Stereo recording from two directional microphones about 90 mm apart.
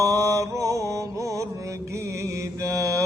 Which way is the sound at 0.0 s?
35° right (ahead or behind).